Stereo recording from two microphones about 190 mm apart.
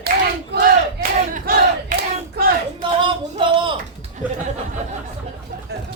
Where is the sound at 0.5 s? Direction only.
60° right (ahead or behind).